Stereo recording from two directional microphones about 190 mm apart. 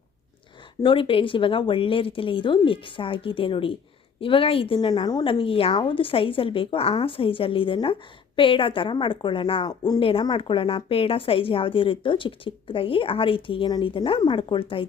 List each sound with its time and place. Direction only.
0.8 s a woman's voice: 25° left (ahead or behind)